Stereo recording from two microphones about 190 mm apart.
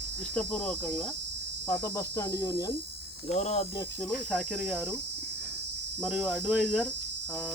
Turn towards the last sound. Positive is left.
turn(degrees=0)  # may be behind; listen again after turning